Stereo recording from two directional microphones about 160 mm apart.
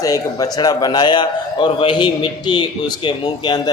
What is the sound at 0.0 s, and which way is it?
A man's voice, 20° left (ahead or behind).